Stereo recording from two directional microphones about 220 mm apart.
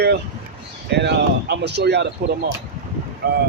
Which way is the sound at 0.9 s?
50° right (ahead or behind).